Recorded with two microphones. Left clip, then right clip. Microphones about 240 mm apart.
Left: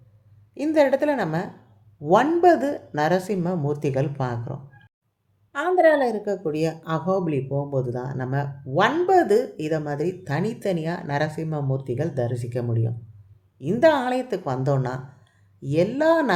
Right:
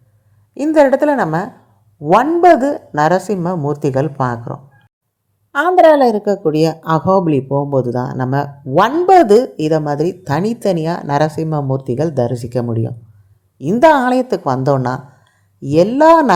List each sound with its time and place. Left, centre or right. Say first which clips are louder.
0.5 s a woman's voice: right 8 dB; right